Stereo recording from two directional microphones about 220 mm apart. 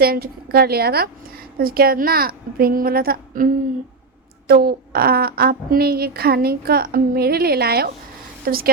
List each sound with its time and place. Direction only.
0.0 s a woman's voice: 45° right (ahead or behind)